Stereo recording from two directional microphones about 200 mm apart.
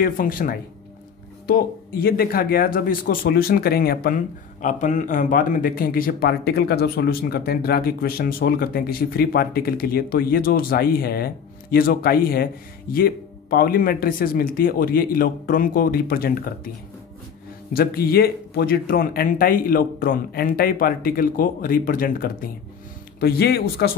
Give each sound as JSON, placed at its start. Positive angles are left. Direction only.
{"t": 0.0, "sound": "a man's voice", "side_deg": 45}
{"t": 17.7, "sound": "a man's voice", "side_deg": 50}